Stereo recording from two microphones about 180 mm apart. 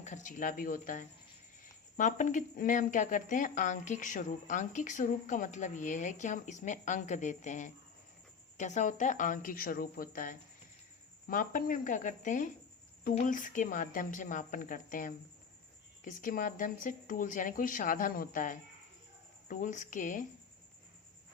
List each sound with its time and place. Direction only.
0.0 s a woman's voice: 45° left (ahead or behind)